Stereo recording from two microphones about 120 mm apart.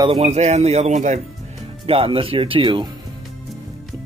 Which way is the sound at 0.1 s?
60° right (ahead or behind).